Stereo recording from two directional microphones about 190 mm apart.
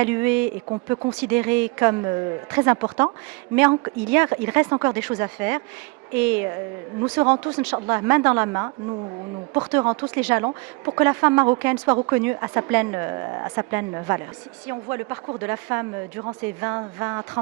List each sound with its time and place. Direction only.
0.0 s speech: 10° right (ahead or behind)
7.0 s speech: 20° right (ahead or behind)
10.2 s speech: 10° right (ahead or behind)
10.4 s speech: 20° right (ahead or behind)